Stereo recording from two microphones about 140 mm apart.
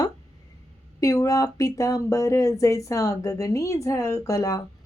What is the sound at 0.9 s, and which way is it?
A woman's voice, 25° left (ahead or behind).